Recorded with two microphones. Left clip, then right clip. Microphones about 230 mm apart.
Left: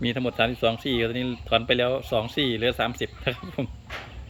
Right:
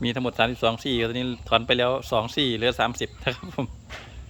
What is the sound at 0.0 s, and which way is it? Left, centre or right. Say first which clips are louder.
Speech: right 1 dB; centre.